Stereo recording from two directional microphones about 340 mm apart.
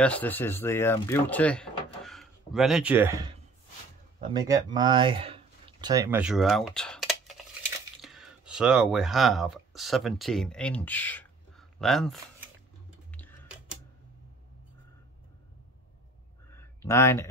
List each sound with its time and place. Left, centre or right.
0.0 s speech: centre
13.1 s tick-tock: centre
16.5 s a sound: centre